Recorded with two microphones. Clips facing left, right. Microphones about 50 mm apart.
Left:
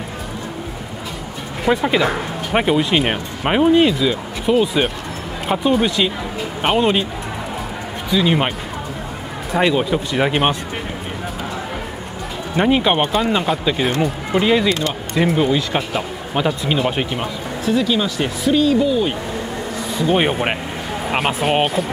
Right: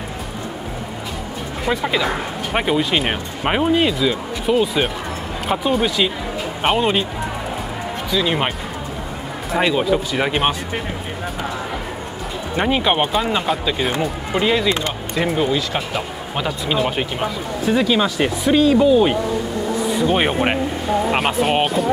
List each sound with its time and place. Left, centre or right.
1.7 s speech: centre
8.1 s speech: centre
12.5 s speech: centre
17.6 s speech: centre
19.8 s speech: centre